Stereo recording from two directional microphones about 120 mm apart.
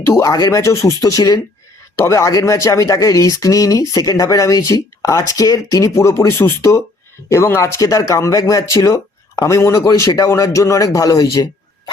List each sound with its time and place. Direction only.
0.0 s speech: 25° left (ahead or behind)